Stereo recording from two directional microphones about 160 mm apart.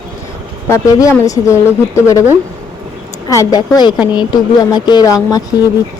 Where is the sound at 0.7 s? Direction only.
20° left (ahead or behind).